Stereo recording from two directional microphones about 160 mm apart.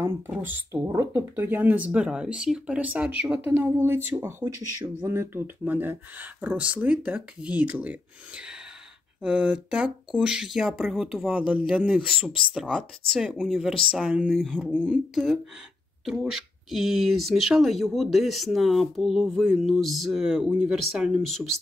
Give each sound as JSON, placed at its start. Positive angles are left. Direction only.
{"t": 0.4, "sound": "speech", "side_deg": -15}